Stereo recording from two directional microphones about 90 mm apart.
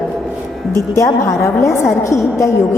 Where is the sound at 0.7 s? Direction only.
35° left (ahead or behind).